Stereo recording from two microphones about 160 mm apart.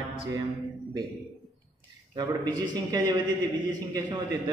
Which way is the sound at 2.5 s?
25° right (ahead or behind).